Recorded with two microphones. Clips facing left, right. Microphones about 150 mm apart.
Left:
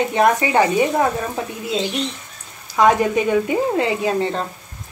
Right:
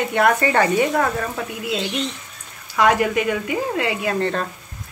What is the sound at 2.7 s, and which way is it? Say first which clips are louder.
Speech: left 2 dB; 20° left (ahead or behind).